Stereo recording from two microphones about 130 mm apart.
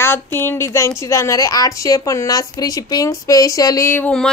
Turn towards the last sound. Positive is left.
turn(degrees=20)  # may be behind; listen again after turning